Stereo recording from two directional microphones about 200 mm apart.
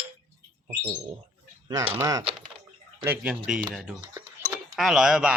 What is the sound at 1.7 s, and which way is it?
Speech, 15° right (ahead or behind).